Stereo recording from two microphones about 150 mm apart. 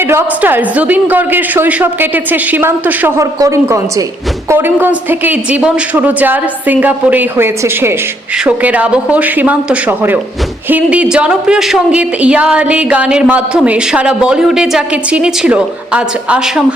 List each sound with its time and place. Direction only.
0.1 s speech: 15° right (ahead or behind)